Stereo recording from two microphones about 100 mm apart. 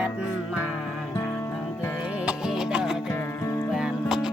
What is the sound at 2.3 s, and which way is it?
Music, 5° right (ahead or behind).